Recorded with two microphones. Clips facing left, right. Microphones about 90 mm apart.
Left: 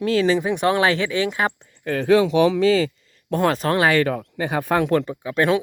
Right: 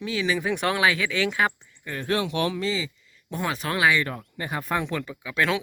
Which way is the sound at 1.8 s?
90° left.